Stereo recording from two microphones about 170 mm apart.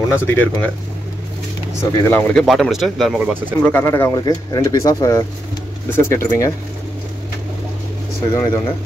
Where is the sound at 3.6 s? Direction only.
15° left (ahead or behind).